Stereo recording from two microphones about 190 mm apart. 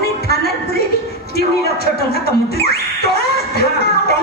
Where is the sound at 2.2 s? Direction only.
55° left (ahead or behind).